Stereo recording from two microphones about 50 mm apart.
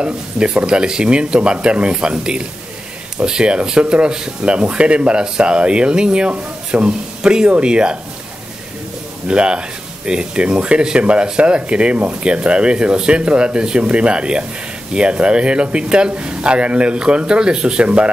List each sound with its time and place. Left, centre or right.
0.0 s speech: right
9.3 s speech: centre